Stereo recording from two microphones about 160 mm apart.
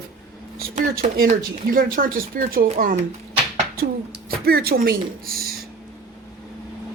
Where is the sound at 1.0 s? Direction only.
55° right (ahead or behind).